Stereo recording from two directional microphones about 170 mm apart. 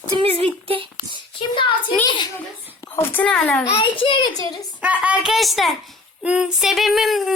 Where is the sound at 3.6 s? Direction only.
35° left (ahead or behind).